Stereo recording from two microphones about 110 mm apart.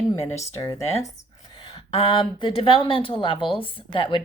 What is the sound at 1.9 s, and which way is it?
Speech, 60° left (ahead or behind).